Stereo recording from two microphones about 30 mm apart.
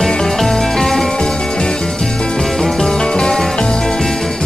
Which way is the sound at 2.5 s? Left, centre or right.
Centre.